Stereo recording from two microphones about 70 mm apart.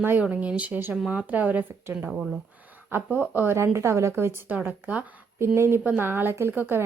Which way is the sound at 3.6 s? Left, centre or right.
Right.